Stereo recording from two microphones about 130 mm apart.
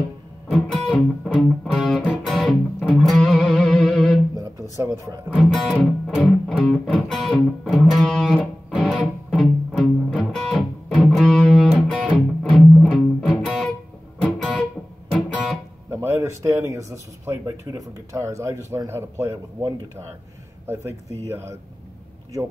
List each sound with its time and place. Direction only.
0.5 s music: 5° left (ahead or behind)
4.7 s speech: 25° right (ahead or behind)
5.3 s music: centre (ahead or behind)
15.9 s speech: 20° right (ahead or behind)